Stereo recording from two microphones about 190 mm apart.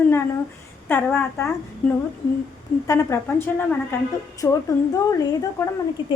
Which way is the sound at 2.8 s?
15° left (ahead or behind).